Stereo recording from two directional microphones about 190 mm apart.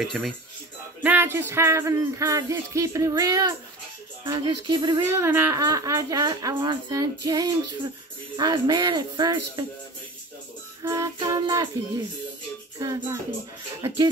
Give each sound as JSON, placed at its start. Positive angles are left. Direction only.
{"t": 0.0, "sound": "speech", "side_deg": 0}
{"t": 1.0, "sound": "music", "side_deg": -10}
{"t": 4.2, "sound": "speech", "side_deg": -25}
{"t": 5.0, "sound": "speech", "side_deg": -10}
{"t": 10.8, "sound": "speech", "side_deg": -15}
{"t": 12.7, "sound": "music", "side_deg": -15}
{"t": 13.8, "sound": "speech", "side_deg": -25}